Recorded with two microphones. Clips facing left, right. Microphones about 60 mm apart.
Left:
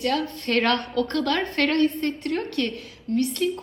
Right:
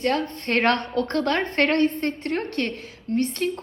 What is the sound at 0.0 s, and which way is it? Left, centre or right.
A woman's voice, right.